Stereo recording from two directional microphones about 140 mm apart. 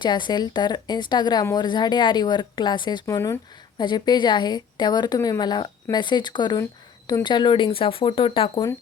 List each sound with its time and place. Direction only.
0.0 s a woman's voice: 30° left (ahead or behind)
3.2 s speech: 20° left (ahead or behind)
3.8 s a woman's voice: 30° left (ahead or behind)